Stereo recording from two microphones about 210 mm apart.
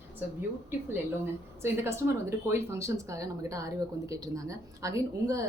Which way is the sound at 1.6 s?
10° right (ahead or behind).